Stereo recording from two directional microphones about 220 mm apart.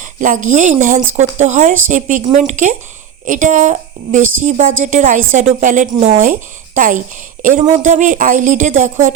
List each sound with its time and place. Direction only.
0.0 s a woman's voice: 35° right (ahead or behind)